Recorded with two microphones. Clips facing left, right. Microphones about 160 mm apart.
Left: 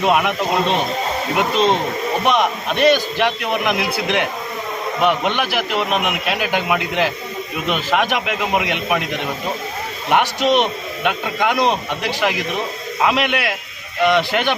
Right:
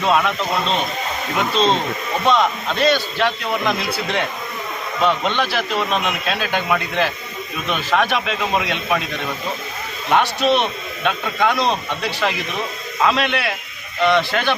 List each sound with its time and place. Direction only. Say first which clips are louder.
0.0 s speech: left 1 dB; 15° left (ahead or behind)